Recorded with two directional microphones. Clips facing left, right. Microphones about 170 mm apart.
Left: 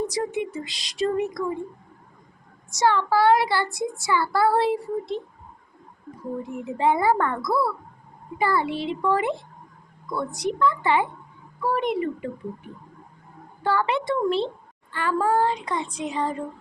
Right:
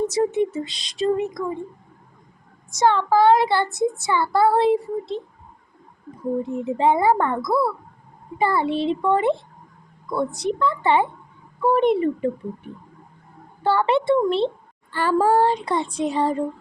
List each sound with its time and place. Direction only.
0.1 s a child's voice: 25° right (ahead or behind)
2.8 s a child's voice: 20° right (ahead or behind)
6.4 s a child's voice: 20° right (ahead or behind)
13.6 s a child's voice: 25° right (ahead or behind)
14.9 s female singing: 30° right (ahead or behind)